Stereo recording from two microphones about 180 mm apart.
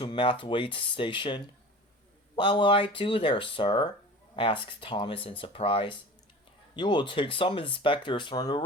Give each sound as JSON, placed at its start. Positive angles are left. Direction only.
{"t": 0.0, "sound": "speech", "side_deg": 30}